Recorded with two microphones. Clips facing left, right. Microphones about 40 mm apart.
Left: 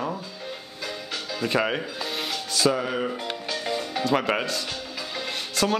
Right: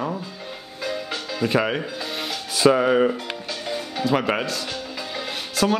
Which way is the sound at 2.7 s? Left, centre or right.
Right.